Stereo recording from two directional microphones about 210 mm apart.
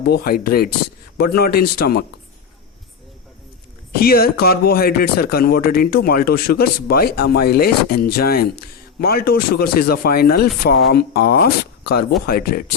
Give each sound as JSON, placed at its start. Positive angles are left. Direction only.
{"t": 0.1, "sound": "speech", "side_deg": 45}
{"t": 3.9, "sound": "speech", "side_deg": 45}